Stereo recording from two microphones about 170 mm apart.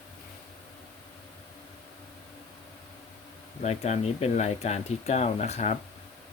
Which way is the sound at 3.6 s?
40° left (ahead or behind).